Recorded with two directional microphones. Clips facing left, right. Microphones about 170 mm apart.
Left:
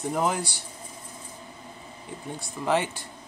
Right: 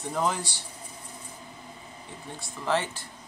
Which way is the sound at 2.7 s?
15° left (ahead or behind).